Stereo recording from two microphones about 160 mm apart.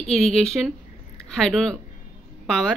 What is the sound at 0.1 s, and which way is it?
Speech, 5° left (ahead or behind).